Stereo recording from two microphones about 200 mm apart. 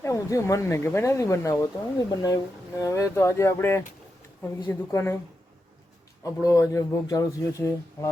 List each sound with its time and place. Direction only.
0.0 s speech: 15° left (ahead or behind)
6.2 s speech: 15° left (ahead or behind)